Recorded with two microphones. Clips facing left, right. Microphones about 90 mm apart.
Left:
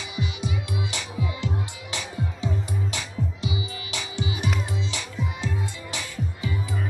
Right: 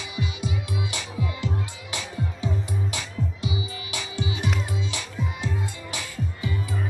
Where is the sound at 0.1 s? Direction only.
20° left (ahead or behind).